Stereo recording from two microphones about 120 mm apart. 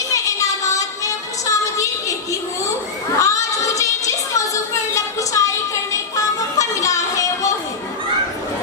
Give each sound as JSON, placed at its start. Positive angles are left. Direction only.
{"t": 0.1, "sound": "music", "side_deg": 25}
{"t": 3.2, "sound": "child singing", "side_deg": 25}
{"t": 4.9, "sound": "music", "side_deg": 25}